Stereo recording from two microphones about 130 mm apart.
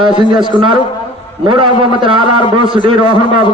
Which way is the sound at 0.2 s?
40° right (ahead or behind).